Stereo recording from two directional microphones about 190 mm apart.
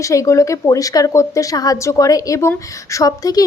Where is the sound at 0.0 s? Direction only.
15° left (ahead or behind).